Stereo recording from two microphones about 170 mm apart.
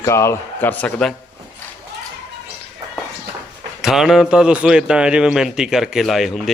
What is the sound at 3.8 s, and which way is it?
A man's voice, centre (ahead or behind).